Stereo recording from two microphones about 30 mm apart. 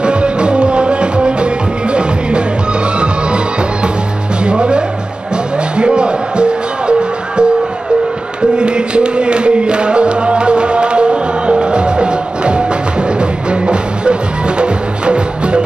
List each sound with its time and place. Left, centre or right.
0.0 s music: right
4.5 s music: right